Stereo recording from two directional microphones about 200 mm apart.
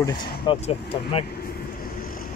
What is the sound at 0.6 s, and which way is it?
Speech, 30° left (ahead or behind).